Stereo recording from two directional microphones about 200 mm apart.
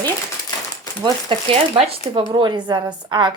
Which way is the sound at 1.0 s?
25° right (ahead or behind).